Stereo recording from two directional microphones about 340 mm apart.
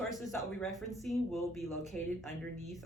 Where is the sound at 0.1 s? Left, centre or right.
Centre.